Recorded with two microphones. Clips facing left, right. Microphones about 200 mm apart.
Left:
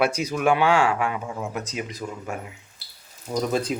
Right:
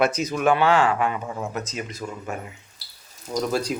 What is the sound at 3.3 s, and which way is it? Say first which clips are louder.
Speech: even; 25° left (ahead or behind).